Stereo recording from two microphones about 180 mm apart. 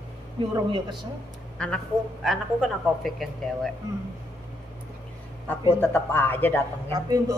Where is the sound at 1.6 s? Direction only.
5° left (ahead or behind).